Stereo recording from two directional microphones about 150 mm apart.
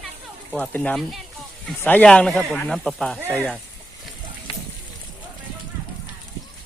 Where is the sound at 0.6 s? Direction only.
10° left (ahead or behind).